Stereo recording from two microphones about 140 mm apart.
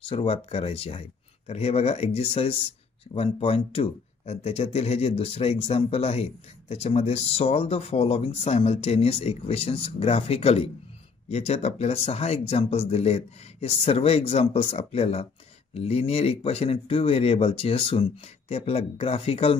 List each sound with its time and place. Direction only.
0.0 s speech: 45° left (ahead or behind)